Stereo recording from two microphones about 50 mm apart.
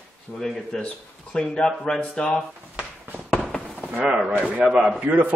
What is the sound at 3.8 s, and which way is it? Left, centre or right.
A man's voice, right.